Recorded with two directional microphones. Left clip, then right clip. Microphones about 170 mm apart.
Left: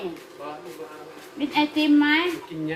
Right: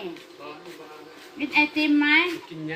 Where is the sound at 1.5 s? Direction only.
15° left (ahead or behind).